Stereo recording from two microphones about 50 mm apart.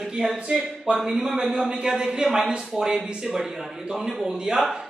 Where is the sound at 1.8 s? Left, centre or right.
Centre.